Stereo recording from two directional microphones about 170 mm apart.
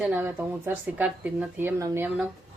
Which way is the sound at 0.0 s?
10° right (ahead or behind).